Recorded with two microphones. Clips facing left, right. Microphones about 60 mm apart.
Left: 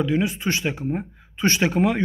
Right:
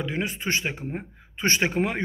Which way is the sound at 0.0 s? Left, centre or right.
Right.